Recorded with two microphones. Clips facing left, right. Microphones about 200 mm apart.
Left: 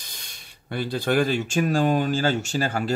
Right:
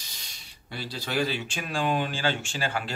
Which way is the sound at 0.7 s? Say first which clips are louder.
Left 7 dB; 55° left (ahead or behind).